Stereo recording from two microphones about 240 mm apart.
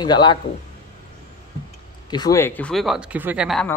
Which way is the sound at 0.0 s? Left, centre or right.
Centre.